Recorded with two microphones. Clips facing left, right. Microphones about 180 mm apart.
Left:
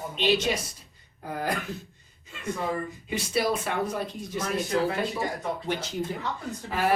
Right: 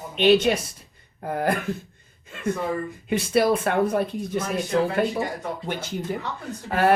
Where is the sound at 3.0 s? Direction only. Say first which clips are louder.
Right 7 dB; 55° right (ahead or behind).